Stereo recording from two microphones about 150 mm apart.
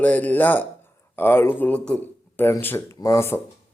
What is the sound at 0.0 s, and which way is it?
Speech, 10° left (ahead or behind).